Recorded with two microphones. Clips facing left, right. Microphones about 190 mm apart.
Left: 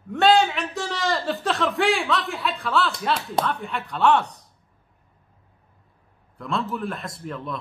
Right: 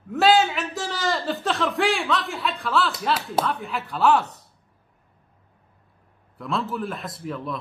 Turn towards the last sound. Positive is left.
turn(degrees=0)  # may be behind; listen again after turning